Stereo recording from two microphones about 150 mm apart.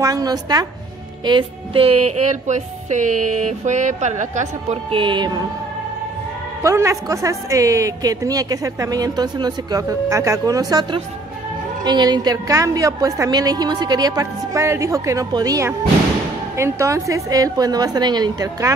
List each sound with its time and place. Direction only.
0.0 s a woman's voice: 25° right (ahead or behind)
1.2 s music: 35° right (ahead or behind); by 4.7 s 50° right (ahead or behind)
4.9 s music: 30° right (ahead or behind)
6.6 s a woman's voice: 20° right (ahead or behind)